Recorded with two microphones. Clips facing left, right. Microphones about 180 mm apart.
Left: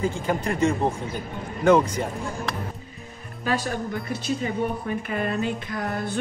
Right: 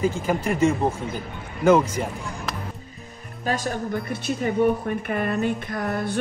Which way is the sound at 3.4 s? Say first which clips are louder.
Even; 45° right (ahead or behind).